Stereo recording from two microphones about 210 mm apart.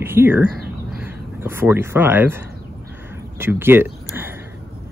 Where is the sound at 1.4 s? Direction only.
10° right (ahead or behind).